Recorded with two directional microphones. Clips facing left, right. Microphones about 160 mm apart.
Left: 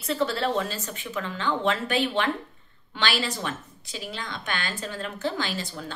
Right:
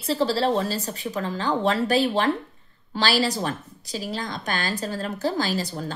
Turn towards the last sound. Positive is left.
turn(degrees=-40)  # may be behind; listen again after turning